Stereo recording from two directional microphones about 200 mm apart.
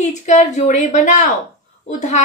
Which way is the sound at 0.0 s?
35° left (ahead or behind).